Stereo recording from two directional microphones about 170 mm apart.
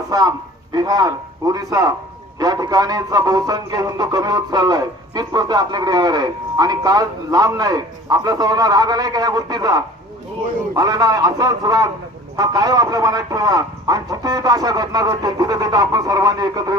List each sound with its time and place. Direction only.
0.1 s a man's voice: 25° right (ahead or behind)